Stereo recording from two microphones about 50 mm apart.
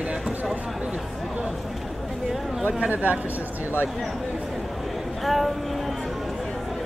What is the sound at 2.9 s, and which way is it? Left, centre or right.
Speech, right.